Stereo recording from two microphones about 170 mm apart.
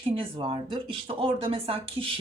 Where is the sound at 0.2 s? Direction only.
30° right (ahead or behind).